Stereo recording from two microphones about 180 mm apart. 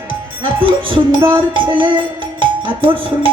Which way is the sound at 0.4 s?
30° right (ahead or behind).